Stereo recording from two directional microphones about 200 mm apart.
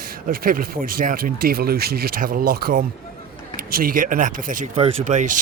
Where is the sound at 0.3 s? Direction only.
45° right (ahead or behind).